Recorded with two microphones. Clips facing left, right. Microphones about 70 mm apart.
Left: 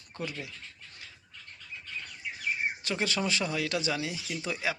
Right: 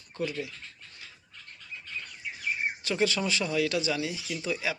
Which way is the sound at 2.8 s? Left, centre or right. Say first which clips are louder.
Right 3 dB; left.